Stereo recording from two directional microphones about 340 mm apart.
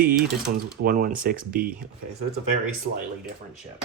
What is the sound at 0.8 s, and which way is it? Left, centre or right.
Speech, right.